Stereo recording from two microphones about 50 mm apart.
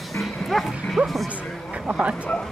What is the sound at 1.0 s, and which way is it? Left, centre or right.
Music, right.